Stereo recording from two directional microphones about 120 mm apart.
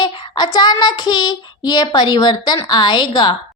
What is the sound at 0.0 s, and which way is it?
A woman's voice, 40° left (ahead or behind).